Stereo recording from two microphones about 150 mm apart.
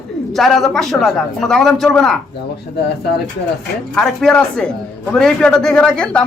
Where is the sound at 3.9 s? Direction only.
5° left (ahead or behind).